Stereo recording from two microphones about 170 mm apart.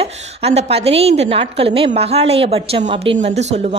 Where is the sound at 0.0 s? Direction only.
40° right (ahead or behind).